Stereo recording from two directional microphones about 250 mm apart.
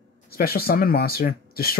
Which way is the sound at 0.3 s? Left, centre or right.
Left.